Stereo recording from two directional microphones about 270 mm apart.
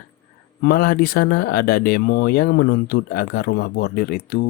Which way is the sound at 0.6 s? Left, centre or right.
Left.